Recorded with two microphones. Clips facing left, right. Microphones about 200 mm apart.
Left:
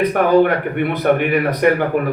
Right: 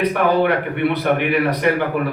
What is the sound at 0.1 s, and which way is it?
A man's voice, 45° left (ahead or behind).